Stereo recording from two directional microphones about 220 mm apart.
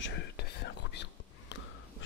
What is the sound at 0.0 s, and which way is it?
Whispering, 50° left (ahead or behind).